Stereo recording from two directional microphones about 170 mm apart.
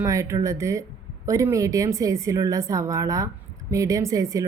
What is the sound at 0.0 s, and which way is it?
A woman's voice, 20° right (ahead or behind).